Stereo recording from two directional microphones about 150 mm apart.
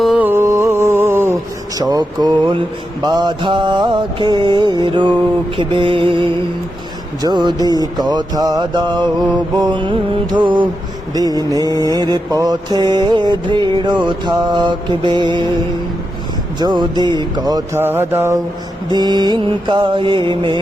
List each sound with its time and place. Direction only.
0.0 s music: 10° right (ahead or behind); by 15.5 s 30° right (ahead or behind)
16.6 s music: 30° right (ahead or behind)
17.8 s mantra: 15° right (ahead or behind)
18.9 s music: 30° right (ahead or behind)